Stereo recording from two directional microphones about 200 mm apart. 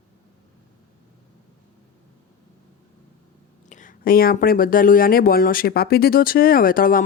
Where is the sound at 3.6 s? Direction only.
40° left (ahead or behind).